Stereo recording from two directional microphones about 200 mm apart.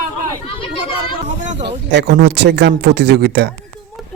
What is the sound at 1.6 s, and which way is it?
Speech, 60° right (ahead or behind).